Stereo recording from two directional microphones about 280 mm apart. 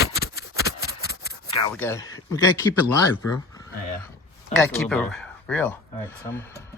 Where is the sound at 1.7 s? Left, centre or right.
Centre.